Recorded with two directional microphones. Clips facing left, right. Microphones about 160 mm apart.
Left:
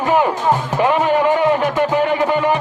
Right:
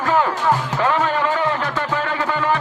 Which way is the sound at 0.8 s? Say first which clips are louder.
Left 4 dB; 15° left (ahead or behind).